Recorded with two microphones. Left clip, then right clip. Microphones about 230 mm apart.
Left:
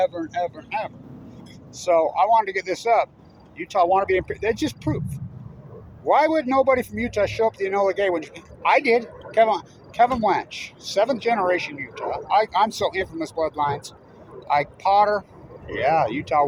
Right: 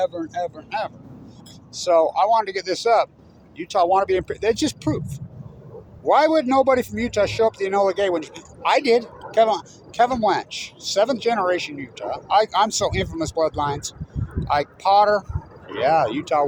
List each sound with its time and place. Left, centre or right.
0.0 s a man's voice: centre